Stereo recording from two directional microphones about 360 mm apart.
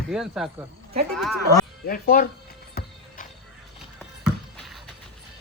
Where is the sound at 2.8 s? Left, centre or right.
Left.